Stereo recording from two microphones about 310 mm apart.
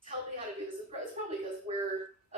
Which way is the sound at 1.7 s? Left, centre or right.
Centre.